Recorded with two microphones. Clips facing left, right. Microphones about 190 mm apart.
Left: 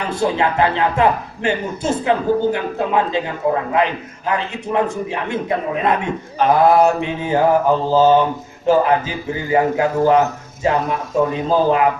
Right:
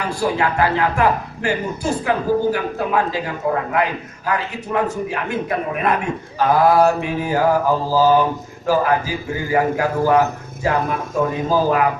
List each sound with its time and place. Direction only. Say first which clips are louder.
0.1 s a man's voice: left 2 dB; 20° left (ahead or behind)